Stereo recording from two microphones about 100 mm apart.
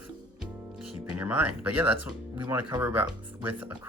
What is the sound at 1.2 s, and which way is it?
Speech, 15° right (ahead or behind).